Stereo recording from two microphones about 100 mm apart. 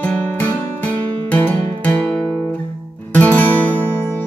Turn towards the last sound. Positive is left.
turn(degrees=15)  # may be behind; listen again after turning